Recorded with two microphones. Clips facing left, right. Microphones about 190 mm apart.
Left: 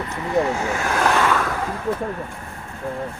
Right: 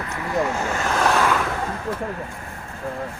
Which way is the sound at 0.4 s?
15° left (ahead or behind).